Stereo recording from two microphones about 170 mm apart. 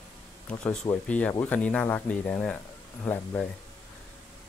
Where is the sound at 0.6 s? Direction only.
5° left (ahead or behind).